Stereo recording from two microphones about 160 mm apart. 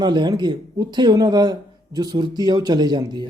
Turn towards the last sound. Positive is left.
turn(degrees=-25)  # may be behind; listen again after turning